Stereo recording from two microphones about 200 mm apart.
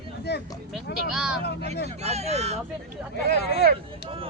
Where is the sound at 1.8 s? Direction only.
30° right (ahead or behind).